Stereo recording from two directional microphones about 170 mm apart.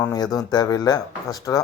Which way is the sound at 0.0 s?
20° left (ahead or behind).